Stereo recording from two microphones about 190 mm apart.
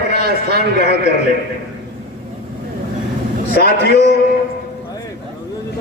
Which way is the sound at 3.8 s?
60° left (ahead or behind).